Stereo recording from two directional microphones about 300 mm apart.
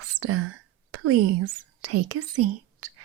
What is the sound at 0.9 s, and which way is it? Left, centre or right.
Speech, right.